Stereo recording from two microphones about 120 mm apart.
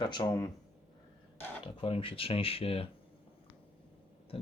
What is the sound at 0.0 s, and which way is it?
Speech, 40° left (ahead or behind).